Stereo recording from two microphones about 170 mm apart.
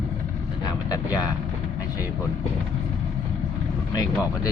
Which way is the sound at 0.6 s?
20° left (ahead or behind).